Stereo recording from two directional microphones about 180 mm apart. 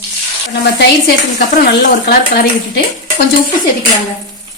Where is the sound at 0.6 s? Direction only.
65° left (ahead or behind).